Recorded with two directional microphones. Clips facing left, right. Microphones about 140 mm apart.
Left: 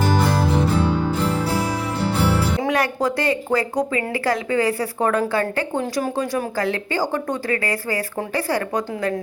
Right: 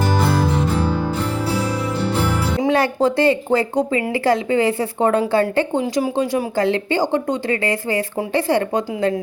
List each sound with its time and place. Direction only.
2.6 s speech: 30° right (ahead or behind)